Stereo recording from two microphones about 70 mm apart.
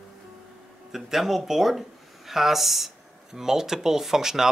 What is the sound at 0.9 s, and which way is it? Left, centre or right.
Speech, centre.